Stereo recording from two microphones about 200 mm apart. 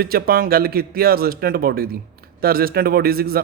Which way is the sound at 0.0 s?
50° right (ahead or behind).